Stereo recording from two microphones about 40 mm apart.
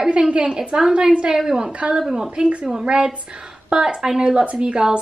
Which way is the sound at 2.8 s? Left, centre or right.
Right.